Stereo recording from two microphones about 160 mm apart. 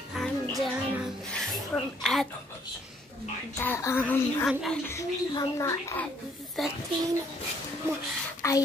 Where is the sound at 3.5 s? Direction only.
15° left (ahead or behind).